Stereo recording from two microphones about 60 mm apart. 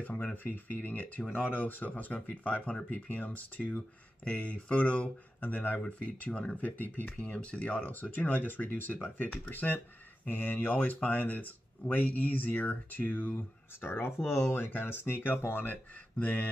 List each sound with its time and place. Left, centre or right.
0.0 s speech: left
14.3 s speech: left
14.6 s speech: left